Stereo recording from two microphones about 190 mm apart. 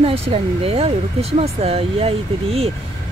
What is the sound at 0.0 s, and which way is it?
Speech, 30° right (ahead or behind).